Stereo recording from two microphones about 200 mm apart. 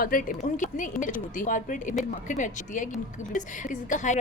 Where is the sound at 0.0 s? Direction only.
45° left (ahead or behind).